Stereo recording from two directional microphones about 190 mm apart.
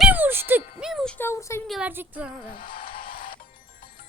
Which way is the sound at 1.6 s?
Centre (ahead or behind).